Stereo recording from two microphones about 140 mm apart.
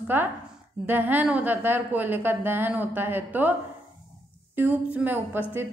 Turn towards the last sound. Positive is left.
turn(degrees=-15)  # may be behind; listen again after turning